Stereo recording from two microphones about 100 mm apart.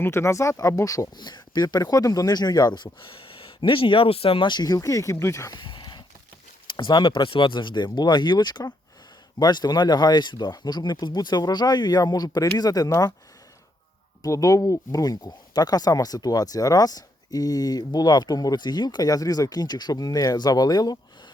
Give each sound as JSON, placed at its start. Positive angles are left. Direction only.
{"t": 0.0, "sound": "speech", "side_deg": 25}
{"t": 5.5, "sound": "a sound", "side_deg": 55}
{"t": 6.7, "sound": "speech", "side_deg": 55}
{"t": 14.2, "sound": "speech", "side_deg": 35}